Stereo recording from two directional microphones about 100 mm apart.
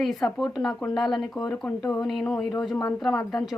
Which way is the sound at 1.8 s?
35° left (ahead or behind).